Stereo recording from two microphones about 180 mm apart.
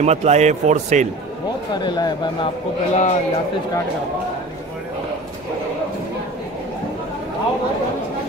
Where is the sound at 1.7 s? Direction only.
25° left (ahead or behind).